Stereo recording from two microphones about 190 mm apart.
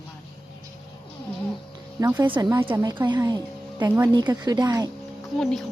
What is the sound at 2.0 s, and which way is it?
Speech, 20° right (ahead or behind).